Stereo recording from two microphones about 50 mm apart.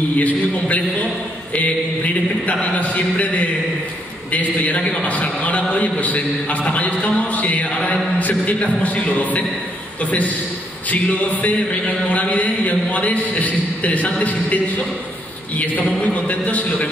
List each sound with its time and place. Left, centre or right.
0.2 s a man's voice: left
2.4 s a man's voice: left
10.9 s a man's voice: left